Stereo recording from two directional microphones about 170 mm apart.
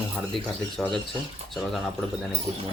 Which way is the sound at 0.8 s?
Centre (ahead or behind).